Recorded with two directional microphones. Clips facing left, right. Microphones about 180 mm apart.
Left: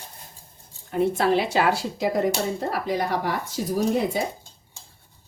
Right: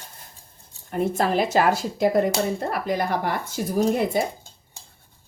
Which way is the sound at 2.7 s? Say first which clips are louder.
Right 1 dB; 55° right (ahead or behind).